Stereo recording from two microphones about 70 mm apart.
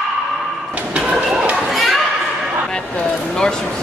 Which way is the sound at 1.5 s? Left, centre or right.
Centre.